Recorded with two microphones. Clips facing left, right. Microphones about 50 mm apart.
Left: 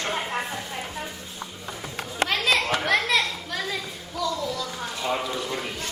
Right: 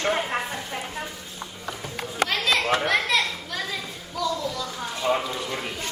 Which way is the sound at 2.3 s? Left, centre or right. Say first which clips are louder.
Left 2 dB; centre.